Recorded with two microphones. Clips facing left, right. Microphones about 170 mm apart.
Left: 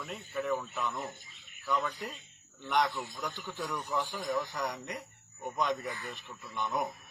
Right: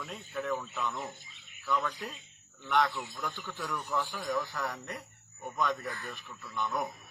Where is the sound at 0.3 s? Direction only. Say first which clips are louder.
Left 1 dB; 10° left (ahead or behind).